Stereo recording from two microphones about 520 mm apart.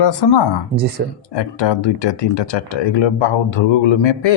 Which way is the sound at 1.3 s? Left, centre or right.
Left.